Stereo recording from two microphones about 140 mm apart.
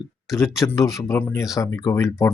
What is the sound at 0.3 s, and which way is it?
Speech, 20° left (ahead or behind).